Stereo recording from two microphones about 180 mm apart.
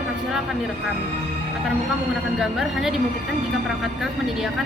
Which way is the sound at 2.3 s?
Centre (ahead or behind).